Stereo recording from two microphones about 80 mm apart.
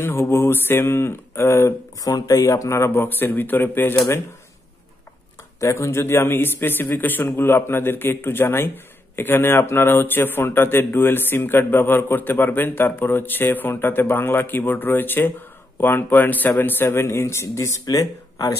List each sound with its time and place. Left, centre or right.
0.0 s speech: left
5.6 s a man's voice: left
17.8 s speech: left